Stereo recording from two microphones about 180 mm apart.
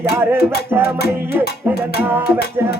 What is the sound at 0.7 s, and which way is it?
Music, 15° right (ahead or behind).